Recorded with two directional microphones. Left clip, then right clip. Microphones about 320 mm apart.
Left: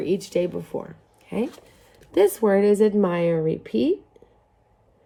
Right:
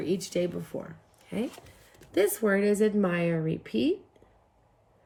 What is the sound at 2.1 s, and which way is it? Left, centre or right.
A woman's voice, centre.